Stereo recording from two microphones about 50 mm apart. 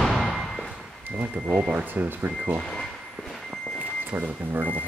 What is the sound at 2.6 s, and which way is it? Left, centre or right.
Speech, centre.